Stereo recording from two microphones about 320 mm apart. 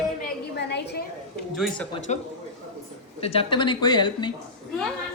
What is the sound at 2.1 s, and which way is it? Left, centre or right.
A woman's voice, left.